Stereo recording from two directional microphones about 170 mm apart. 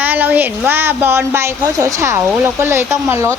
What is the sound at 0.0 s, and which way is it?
A woman's voice, 10° right (ahead or behind).